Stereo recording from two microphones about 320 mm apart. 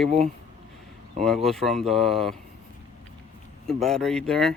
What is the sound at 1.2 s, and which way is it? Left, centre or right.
Speech, centre.